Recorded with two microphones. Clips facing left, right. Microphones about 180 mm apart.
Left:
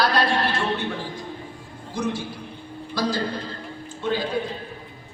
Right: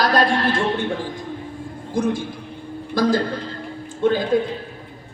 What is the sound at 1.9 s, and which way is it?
A man's voice, 50° right (ahead or behind).